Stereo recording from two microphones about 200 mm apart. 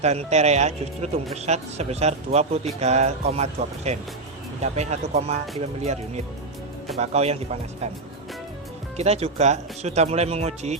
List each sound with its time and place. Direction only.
0.0 s speech: 35° right (ahead or behind)
7.0 s speech: 30° right (ahead or behind)
9.0 s speech: 30° right (ahead or behind)